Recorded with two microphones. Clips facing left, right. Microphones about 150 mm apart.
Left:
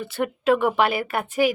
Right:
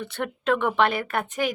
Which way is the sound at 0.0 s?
5° left (ahead or behind).